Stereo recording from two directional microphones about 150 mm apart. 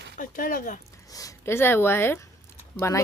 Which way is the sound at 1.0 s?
25° left (ahead or behind).